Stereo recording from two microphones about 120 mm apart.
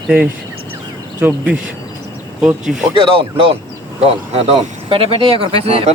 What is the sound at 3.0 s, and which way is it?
Speech, 50° right (ahead or behind).